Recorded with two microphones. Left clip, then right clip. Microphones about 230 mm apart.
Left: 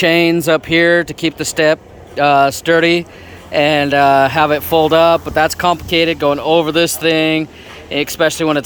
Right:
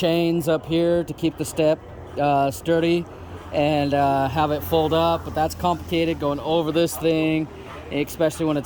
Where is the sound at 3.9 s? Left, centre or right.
Left.